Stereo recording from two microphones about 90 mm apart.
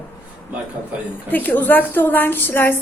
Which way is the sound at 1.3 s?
20° left (ahead or behind).